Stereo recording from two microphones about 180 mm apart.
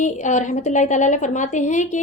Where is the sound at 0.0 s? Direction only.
40° left (ahead or behind).